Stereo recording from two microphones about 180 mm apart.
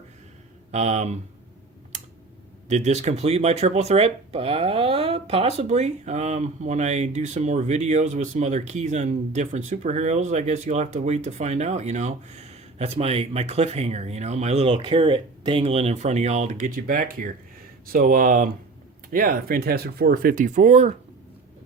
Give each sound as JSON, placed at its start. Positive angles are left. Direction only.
{"t": 0.7, "sound": "speech", "side_deg": -40}
{"t": 2.6, "sound": "speech", "side_deg": -40}